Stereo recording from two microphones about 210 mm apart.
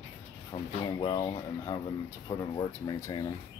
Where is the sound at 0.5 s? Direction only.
20° left (ahead or behind).